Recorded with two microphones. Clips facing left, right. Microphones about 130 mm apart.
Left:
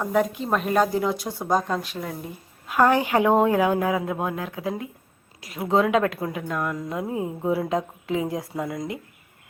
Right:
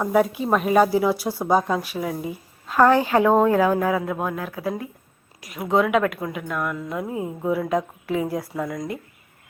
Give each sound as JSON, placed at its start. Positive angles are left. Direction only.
{"t": 0.0, "sound": "speech", "side_deg": -5}
{"t": 2.6, "sound": "a woman's voice", "side_deg": 15}